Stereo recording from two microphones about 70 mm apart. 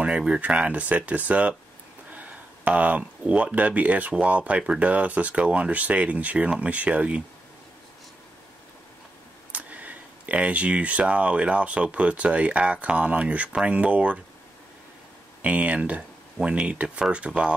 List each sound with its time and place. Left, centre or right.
0.0 s speech: centre
9.5 s speech: right
15.4 s speech: centre